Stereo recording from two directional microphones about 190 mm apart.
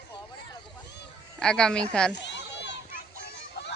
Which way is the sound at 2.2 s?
65° left (ahead or behind).